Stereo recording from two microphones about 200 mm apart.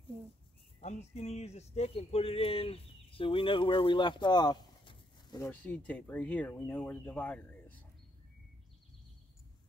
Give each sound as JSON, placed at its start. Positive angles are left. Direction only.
{"t": 0.7, "sound": "speech", "side_deg": 35}
{"t": 5.5, "sound": "speech", "side_deg": 10}